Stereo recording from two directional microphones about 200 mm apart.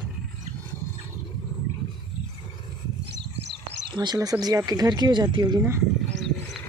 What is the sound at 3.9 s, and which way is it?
Speech, 20° right (ahead or behind).